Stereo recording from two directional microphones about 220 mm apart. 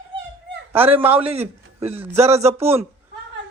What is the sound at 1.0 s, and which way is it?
Speech, 5° right (ahead or behind).